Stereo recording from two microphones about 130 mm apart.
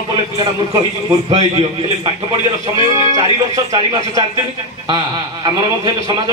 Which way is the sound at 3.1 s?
30° right (ahead or behind).